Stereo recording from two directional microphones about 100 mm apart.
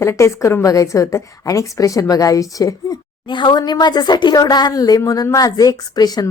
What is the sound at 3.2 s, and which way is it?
Speech, 50° left (ahead or behind).